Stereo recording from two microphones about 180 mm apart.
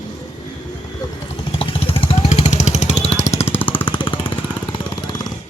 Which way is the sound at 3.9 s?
25° left (ahead or behind).